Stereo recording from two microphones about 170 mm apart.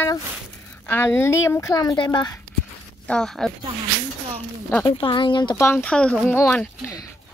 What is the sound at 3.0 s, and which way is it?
Speech, 5° left (ahead or behind).